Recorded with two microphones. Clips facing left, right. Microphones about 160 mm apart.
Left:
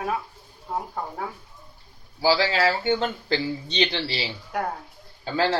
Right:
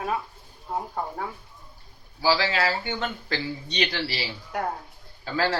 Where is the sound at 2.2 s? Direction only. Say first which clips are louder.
Left 3 dB; 30° left (ahead or behind).